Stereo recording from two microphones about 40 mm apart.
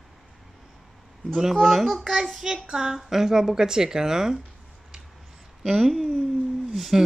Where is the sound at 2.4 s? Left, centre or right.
Centre.